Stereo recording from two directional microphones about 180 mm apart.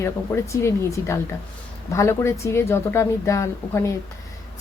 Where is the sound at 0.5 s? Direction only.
15° left (ahead or behind).